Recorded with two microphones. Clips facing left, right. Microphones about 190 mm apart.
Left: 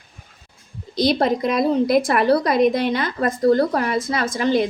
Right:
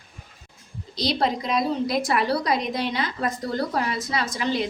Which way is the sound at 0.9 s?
50° left (ahead or behind).